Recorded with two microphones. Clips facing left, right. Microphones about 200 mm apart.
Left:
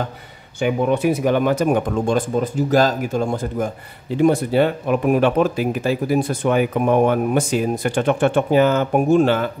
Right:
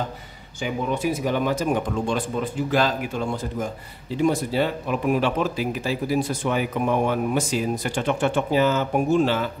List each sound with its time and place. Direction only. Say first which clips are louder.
0.6 s speech: left 7 dB; 60° left (ahead or behind)